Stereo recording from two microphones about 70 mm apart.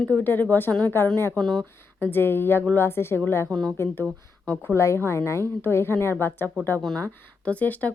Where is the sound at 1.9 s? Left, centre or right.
Left.